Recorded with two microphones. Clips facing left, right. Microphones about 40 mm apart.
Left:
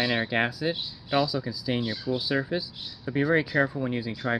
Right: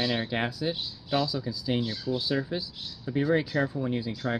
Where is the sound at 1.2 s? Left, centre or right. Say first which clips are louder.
Left 1 dB; centre.